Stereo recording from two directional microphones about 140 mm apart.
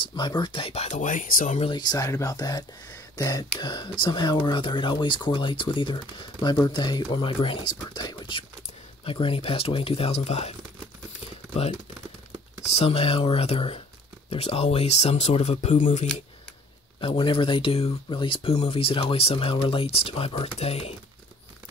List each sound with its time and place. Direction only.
0.0 s speech: 30° left (ahead or behind)
0.8 s speech: 65° left (ahead or behind)
1.6 s speech: 30° left (ahead or behind); by 10.5 s 50° left (ahead or behind)
12.7 s speech: 45° left (ahead or behind)
17.0 s speech: 40° left (ahead or behind)